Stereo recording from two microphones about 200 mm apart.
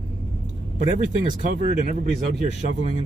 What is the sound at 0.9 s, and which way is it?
Speech, 40° right (ahead or behind).